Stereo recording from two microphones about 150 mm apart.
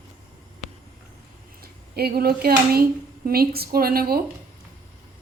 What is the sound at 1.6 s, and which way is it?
A woman's voice, 90° right.